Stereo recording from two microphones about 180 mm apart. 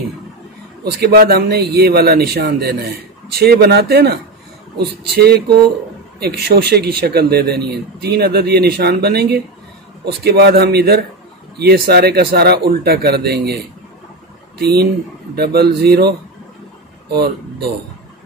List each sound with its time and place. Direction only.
1.0 s speech: 60° right (ahead or behind)
15.3 s speech: 60° right (ahead or behind)